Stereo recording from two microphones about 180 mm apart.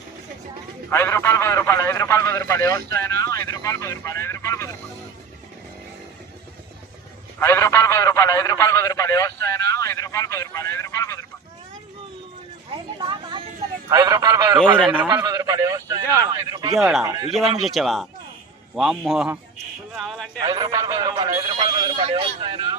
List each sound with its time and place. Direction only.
0.9 s a man's voice: 15° left (ahead or behind)
7.3 s a man's voice: 15° left (ahead or behind)
12.7 s a man's voice: 25° right (ahead or behind)
16.7 s a man's voice: centre (ahead or behind)
20.4 s a man's voice: 20° right (ahead or behind)
21.3 s a man's voice: 35° right (ahead or behind)